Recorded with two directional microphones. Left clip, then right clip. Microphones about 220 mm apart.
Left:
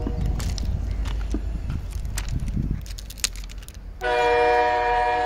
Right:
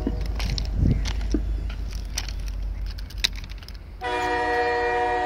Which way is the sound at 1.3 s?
40° left (ahead or behind).